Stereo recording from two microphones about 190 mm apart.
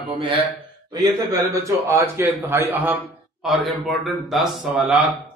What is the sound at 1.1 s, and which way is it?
A man's voice, 15° right (ahead or behind).